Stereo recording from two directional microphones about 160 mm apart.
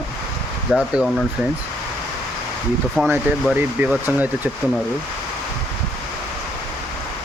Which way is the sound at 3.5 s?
10° right (ahead or behind).